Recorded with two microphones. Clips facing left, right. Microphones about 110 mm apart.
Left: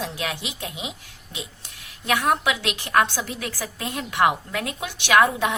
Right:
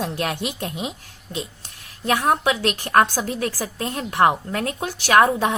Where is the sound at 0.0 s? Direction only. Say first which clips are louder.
Right 5 dB; 45° right (ahead or behind).